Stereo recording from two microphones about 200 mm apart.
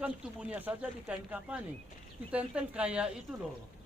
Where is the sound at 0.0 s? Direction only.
5° right (ahead or behind).